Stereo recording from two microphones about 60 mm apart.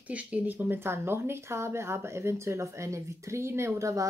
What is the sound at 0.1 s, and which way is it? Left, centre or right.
Speech, right.